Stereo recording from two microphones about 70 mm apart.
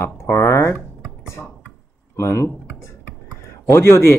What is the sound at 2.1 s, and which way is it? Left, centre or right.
Typing, left.